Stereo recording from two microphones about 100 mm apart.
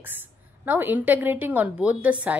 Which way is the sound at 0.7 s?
20° right (ahead or behind).